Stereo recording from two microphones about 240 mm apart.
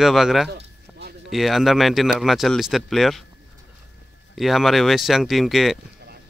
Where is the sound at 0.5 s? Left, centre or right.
Right.